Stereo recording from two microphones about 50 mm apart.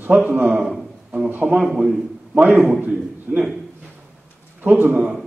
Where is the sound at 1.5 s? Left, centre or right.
Centre.